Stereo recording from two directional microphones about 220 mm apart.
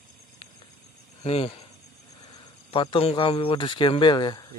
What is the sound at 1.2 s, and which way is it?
Speech, 25° left (ahead or behind).